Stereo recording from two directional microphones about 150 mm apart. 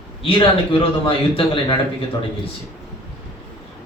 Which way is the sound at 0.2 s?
35° left (ahead or behind).